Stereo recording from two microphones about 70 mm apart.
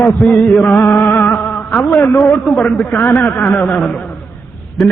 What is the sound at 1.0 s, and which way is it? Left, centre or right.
Music, left.